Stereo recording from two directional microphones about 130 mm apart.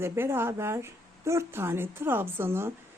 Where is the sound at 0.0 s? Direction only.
20° right (ahead or behind).